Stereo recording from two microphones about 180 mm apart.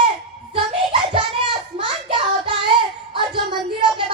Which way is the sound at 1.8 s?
30° right (ahead or behind).